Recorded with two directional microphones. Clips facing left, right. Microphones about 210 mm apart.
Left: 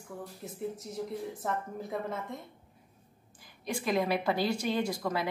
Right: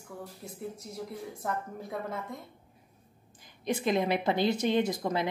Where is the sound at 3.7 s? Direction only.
20° right (ahead or behind).